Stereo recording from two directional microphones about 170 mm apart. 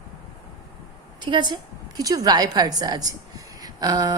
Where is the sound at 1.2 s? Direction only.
25° right (ahead or behind).